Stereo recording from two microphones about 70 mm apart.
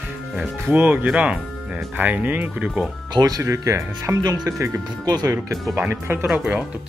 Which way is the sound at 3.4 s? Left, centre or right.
Right.